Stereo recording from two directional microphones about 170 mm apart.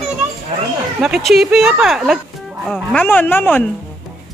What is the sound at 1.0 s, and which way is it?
Speech, 5° right (ahead or behind).